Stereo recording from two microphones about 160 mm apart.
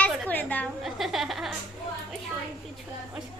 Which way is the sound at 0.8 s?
Centre (ahead or behind).